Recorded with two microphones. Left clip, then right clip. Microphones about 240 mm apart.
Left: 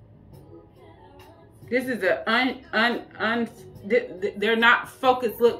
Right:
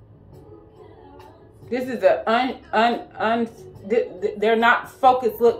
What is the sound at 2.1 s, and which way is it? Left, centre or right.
Speech, centre.